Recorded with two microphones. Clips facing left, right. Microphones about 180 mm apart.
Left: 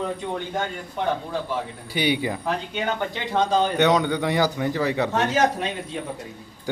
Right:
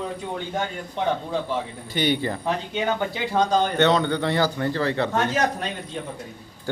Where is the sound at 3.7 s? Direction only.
15° left (ahead or behind).